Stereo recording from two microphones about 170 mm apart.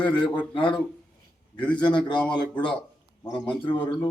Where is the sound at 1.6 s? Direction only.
25° left (ahead or behind).